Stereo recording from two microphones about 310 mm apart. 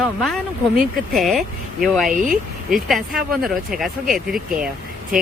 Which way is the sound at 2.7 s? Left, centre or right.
Centre.